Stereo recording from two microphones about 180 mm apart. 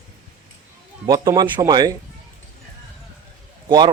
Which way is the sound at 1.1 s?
20° right (ahead or behind).